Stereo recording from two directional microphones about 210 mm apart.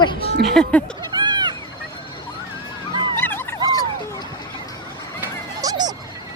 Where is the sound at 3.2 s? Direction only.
10° left (ahead or behind).